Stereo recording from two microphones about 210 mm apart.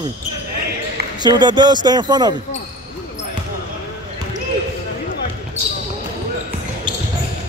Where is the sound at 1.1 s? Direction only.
20° right (ahead or behind).